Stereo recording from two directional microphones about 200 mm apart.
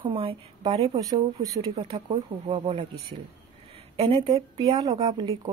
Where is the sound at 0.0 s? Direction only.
25° right (ahead or behind).